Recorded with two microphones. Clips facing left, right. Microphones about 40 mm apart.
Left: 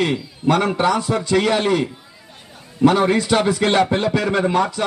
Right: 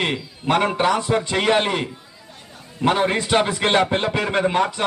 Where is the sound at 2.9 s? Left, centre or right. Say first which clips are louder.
Left 2 dB; right.